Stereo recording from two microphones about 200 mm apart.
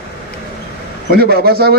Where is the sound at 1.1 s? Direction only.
50° right (ahead or behind).